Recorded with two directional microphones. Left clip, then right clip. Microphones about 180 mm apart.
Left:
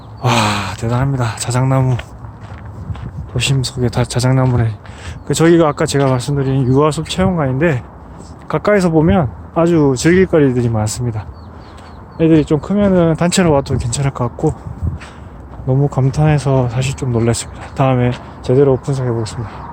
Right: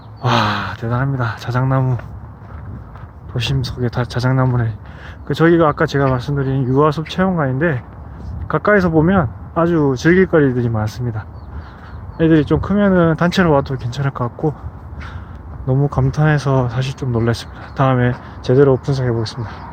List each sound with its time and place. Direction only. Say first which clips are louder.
0.2 s speech: left 1 dB; 15° left (ahead or behind)
3.3 s speech: left 4 dB; 20° left (ahead or behind)
15.6 s speech: left 2 dB; 10° left (ahead or behind)